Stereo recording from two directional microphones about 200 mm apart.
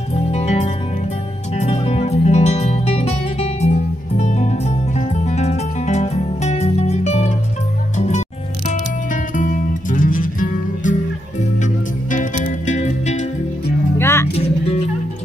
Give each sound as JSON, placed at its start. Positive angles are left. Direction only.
{"t": 0.1, "sound": "music", "side_deg": 35}
{"t": 8.6, "sound": "music", "side_deg": 40}
{"t": 12.1, "sound": "music", "side_deg": 40}
{"t": 13.9, "sound": "music", "side_deg": 10}